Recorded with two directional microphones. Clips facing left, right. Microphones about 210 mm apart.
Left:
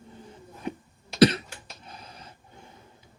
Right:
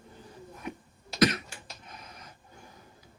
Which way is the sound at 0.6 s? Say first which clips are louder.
Left 5 dB; 30° left (ahead or behind).